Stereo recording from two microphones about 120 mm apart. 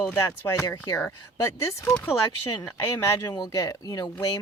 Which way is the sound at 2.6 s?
25° left (ahead or behind).